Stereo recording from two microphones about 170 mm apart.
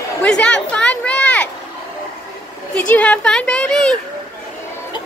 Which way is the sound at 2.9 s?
5° left (ahead or behind).